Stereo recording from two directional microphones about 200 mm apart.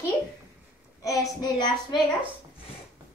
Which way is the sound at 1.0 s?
15° left (ahead or behind).